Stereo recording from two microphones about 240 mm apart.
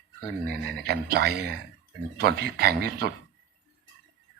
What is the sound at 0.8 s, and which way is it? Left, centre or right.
Speech, right.